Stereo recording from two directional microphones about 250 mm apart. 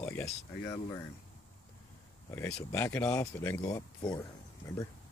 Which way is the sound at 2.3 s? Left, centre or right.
Centre.